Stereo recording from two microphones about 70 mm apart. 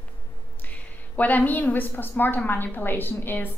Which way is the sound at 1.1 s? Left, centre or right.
Left.